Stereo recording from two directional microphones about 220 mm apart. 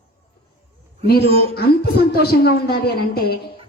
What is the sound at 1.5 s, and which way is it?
A woman's voice, 45° left (ahead or behind).